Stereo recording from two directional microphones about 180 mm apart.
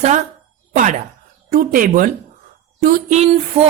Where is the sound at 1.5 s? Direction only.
50° right (ahead or behind).